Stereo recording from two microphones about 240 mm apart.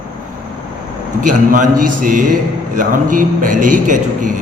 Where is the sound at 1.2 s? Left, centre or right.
Right.